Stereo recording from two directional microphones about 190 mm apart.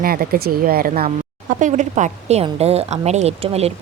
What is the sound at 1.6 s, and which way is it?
A woman's voice, 40° right (ahead or behind).